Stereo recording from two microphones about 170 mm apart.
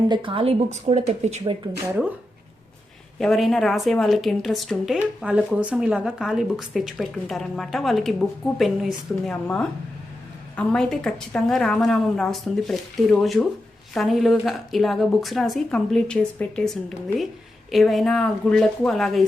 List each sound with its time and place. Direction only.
0.1 s speech: 30° right (ahead or behind)
3.2 s speech: centre (ahead or behind)